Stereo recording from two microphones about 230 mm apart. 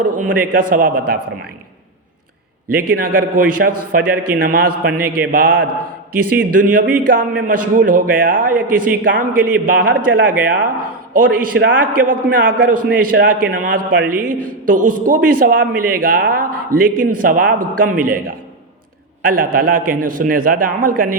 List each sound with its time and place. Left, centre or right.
0.0 s a man's voice: right
2.7 s a man's voice: right